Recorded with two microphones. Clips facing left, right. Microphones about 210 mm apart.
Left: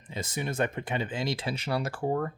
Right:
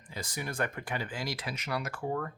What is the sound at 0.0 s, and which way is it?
Speech, 25° left (ahead or behind).